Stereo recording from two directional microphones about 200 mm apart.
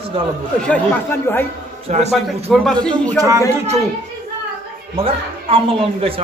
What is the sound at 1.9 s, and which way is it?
Speech, 35° right (ahead or behind).